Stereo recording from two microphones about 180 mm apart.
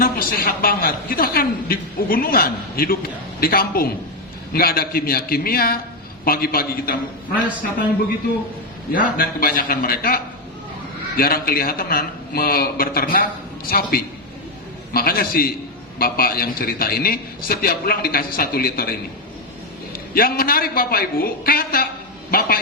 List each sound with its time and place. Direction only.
0.0 s a woman's voice: 55° left (ahead or behind)
8.9 s a woman's voice: 50° left (ahead or behind)
11.2 s a woman's voice: 55° left (ahead or behind)
20.1 s a woman's voice: 55° left (ahead or behind)